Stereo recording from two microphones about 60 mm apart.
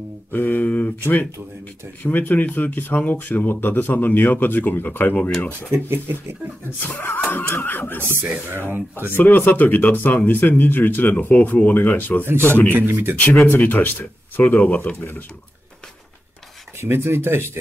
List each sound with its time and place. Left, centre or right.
0.3 s a sound: left
2.0 s speech: left
5.7 s speech: right
6.8 s speech: left
8.0 s speech: right
9.1 s speech: left
12.7 s speech: right
13.6 s speech: left
15.0 s speech: left
16.8 s speech: right